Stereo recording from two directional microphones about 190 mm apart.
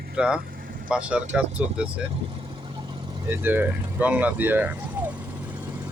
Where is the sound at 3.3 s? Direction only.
10° right (ahead or behind).